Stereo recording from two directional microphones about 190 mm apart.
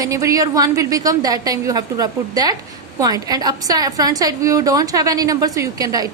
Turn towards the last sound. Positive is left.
turn(degrees=-20)  # may be behind; listen again after turning